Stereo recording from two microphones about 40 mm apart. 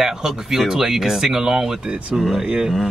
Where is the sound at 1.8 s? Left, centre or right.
Right.